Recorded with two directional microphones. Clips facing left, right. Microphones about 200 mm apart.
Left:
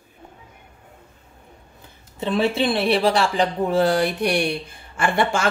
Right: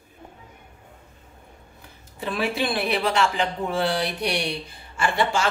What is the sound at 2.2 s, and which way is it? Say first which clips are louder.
Speech: left 5 dB; 25° left (ahead or behind).